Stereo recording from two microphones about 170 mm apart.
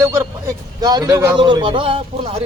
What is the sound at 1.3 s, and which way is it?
Speech, 30° right (ahead or behind).